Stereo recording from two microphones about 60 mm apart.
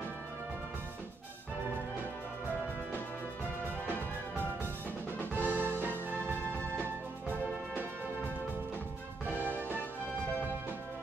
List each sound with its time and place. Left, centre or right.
5.3 s music: right
9.2 s music: right